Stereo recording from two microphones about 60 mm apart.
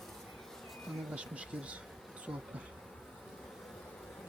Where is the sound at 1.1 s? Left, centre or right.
Right.